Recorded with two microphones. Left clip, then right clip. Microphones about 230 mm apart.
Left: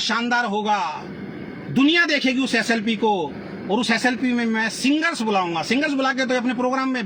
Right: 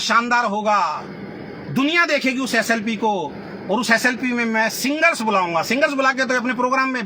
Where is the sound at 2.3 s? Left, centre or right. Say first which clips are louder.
Right 1 dB; right.